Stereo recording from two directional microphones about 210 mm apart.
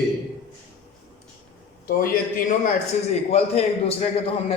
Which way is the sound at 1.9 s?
45° left (ahead or behind).